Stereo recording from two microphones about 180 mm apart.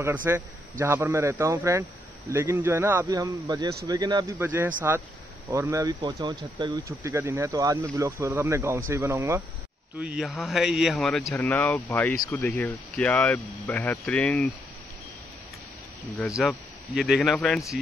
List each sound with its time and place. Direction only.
0.0 s a man's voice: 10° right (ahead or behind); by 14.5 s 5° left (ahead or behind)
16.2 s a man's voice: centre (ahead or behind)